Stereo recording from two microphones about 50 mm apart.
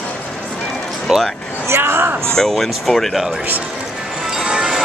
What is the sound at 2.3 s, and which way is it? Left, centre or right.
Speech, centre.